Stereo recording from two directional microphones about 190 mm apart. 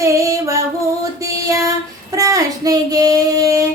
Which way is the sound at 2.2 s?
15° right (ahead or behind).